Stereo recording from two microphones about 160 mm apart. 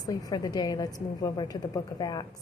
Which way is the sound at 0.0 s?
25° left (ahead or behind).